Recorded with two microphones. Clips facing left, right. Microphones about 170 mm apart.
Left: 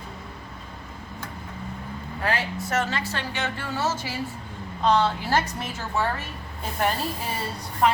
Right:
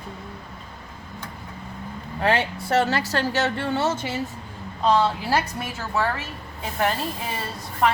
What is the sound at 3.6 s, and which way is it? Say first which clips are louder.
Speech: right 4 dB; 25° right (ahead or behind).